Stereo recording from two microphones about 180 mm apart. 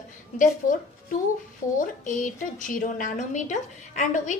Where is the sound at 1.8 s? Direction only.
45° left (ahead or behind).